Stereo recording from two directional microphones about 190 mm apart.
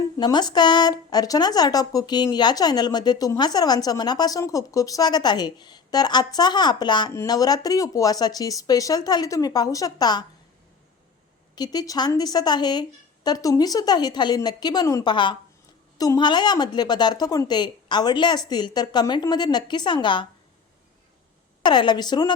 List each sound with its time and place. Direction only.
0.0 s a woman's voice: 20° left (ahead or behind)
11.5 s a woman's voice: 20° left (ahead or behind)
21.6 s a woman's voice: 25° left (ahead or behind)